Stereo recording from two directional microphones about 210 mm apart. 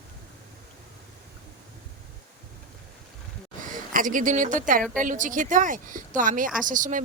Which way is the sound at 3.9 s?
40° right (ahead or behind).